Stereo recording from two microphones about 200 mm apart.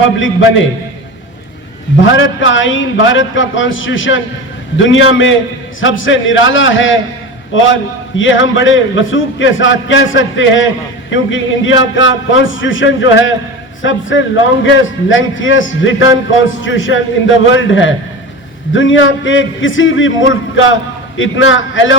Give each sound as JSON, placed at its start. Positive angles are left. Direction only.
{"t": 0.2, "sound": "a man's voice", "side_deg": 70}
{"t": 2.0, "sound": "a man's voice", "side_deg": 75}